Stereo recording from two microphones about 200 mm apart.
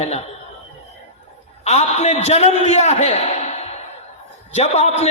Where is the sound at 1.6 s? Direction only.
35° left (ahead or behind).